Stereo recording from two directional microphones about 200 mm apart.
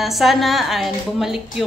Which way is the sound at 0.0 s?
Centre (ahead or behind).